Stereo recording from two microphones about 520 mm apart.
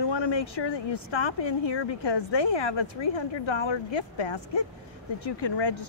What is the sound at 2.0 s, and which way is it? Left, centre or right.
Speech, left.